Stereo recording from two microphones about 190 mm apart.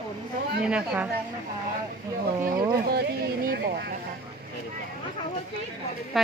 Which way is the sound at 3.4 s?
55° right (ahead or behind).